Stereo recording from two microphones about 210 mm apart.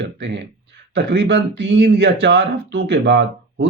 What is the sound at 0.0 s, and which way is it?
Speech, 55° right (ahead or behind).